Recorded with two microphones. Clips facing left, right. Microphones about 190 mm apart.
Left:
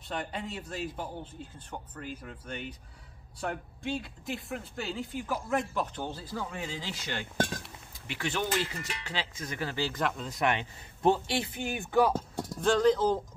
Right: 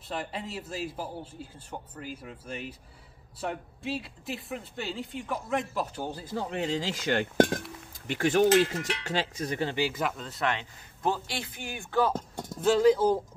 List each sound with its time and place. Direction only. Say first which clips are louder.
0.1 s speech: right 1 dB; centre (ahead or behind)
6.2 s speech: right 3 dB; 25° right (ahead or behind)
6.5 s speech: right 8 dB; 70° right (ahead or behind)
7.0 s cutlery: right 10 dB; 55° right (ahead or behind)
8.1 s speech: right 9 dB; 45° right (ahead or behind)
8.7 s speech: right 7 dB; 80° right
9.0 s speech: right 5 dB; 45° right (ahead or behind)
9.8 s speech: right 2 dB; 10° right (ahead or behind)
10.2 s a man's voice: left 1 dB; 15° left (ahead or behind)
12.5 s speech: right 3 dB; 5° right (ahead or behind)